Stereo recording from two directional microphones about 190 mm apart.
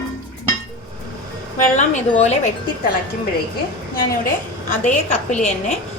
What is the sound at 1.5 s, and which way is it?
Speech, 40° left (ahead or behind).